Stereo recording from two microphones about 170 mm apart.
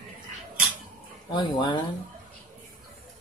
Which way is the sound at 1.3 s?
25° left (ahead or behind).